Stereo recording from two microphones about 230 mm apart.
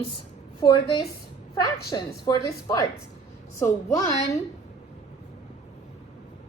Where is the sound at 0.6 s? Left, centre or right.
Centre.